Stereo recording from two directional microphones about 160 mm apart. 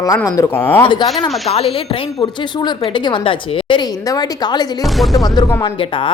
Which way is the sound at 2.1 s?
30° left (ahead or behind).